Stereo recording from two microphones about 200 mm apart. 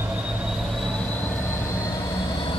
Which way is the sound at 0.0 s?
5° right (ahead or behind).